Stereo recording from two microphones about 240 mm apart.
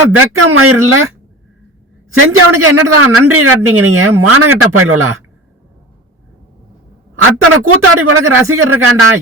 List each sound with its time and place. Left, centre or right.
0.4 s a man's voice: right
2.1 s a man's voice: right
7.2 s a man's voice: right